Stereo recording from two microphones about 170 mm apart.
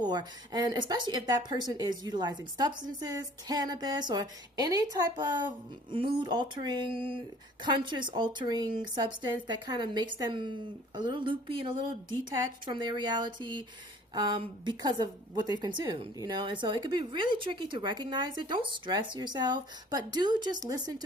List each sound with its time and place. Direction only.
0.0 s a woman's voice: 25° right (ahead or behind)